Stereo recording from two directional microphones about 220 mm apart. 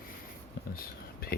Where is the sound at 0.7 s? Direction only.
45° left (ahead or behind).